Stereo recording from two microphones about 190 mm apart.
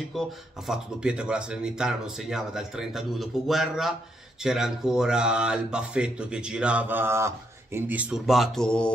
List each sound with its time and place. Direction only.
0.1 s speech: centre (ahead or behind)